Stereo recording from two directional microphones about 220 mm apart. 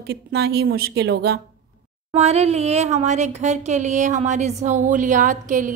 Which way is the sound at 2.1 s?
30° right (ahead or behind).